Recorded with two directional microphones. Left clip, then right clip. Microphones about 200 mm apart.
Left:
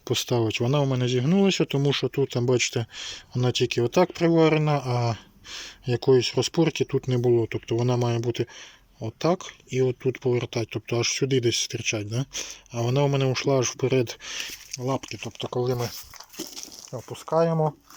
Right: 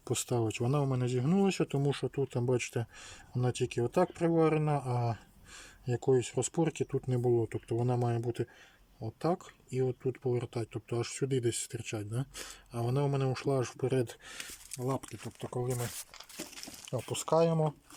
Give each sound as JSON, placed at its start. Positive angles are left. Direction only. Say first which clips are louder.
{"t": 0.0, "sound": "speech", "louder": "left 8 dB", "side_deg": 0}
{"t": 16.9, "sound": "speech", "louder": "left 4 dB", "side_deg": 0}